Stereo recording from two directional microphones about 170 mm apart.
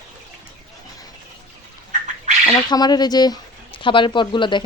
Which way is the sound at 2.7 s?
25° left (ahead or behind).